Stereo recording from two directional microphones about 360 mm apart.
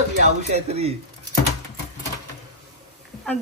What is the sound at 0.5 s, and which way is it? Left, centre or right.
Speech, centre.